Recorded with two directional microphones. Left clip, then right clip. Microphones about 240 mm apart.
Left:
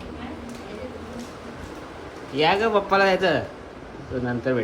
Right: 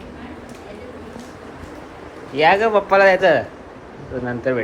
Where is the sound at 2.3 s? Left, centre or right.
Centre.